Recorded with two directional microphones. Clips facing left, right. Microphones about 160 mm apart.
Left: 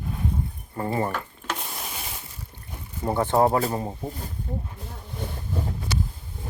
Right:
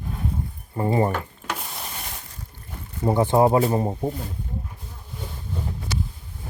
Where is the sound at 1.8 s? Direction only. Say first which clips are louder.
Even; 5° left (ahead or behind).